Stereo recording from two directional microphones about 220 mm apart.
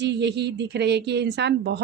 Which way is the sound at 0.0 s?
50° right (ahead or behind).